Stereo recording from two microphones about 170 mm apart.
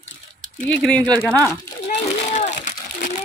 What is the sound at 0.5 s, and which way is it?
Speech, 5° left (ahead or behind).